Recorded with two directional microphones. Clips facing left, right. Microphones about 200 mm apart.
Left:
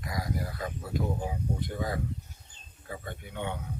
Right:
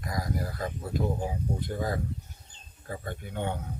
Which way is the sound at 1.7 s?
40° right (ahead or behind).